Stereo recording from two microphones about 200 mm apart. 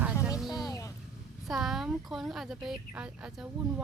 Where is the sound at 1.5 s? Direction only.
Centre (ahead or behind).